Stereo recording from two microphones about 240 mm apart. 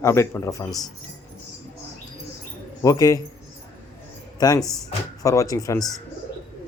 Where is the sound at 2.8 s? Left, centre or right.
Centre.